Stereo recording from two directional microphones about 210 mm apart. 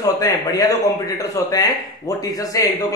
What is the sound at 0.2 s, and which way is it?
A man's voice, 15° left (ahead or behind).